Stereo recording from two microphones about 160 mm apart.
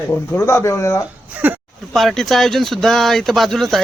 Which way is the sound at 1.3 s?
10° right (ahead or behind).